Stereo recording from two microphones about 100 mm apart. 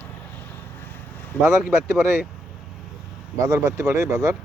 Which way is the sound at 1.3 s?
15° left (ahead or behind).